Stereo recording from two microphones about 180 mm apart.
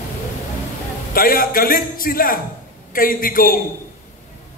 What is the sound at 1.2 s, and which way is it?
A man's voice, 50° left (ahead or behind).